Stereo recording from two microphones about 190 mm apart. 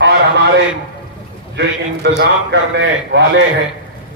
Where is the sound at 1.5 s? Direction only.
65° right (ahead or behind).